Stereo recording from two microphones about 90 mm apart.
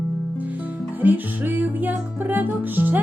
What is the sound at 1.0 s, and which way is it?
Music, 20° right (ahead or behind).